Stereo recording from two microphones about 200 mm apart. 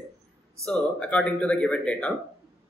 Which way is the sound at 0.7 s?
5° left (ahead or behind).